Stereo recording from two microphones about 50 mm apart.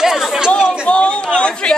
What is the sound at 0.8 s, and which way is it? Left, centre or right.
Speech, left.